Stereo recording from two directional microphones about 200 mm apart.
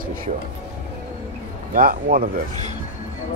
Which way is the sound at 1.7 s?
45° right (ahead or behind).